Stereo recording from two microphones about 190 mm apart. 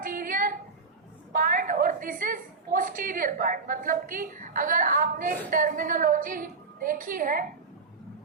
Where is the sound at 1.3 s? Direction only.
50° right (ahead or behind).